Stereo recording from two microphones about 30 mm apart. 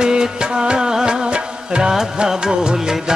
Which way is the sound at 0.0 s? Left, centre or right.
Right.